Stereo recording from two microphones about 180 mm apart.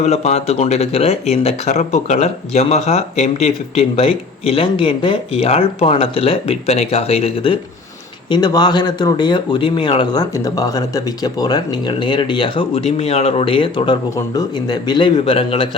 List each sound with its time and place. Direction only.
0.0 s speech: 35° left (ahead or behind)